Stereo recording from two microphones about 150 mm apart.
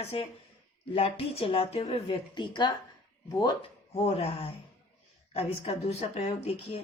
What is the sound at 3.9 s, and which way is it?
A woman's voice, 45° left (ahead or behind).